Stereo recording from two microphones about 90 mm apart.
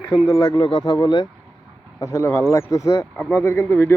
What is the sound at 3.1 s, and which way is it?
Speech, 20° left (ahead or behind).